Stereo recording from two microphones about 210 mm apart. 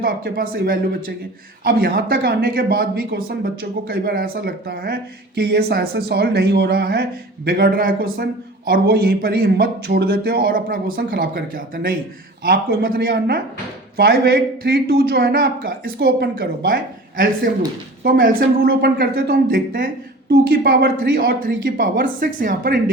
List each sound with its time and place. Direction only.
0.0 s speech: 45° right (ahead or behind)